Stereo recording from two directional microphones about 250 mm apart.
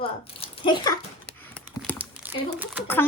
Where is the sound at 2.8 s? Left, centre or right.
Centre.